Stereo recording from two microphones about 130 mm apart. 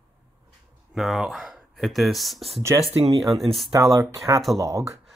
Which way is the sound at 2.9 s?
45° right (ahead or behind).